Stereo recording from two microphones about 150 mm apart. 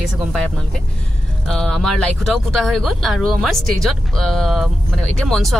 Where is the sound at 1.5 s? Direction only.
5° left (ahead or behind).